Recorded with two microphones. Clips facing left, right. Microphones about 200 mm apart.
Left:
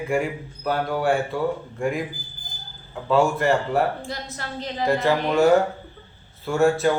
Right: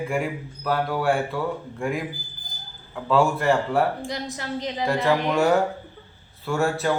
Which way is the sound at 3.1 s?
Centre (ahead or behind).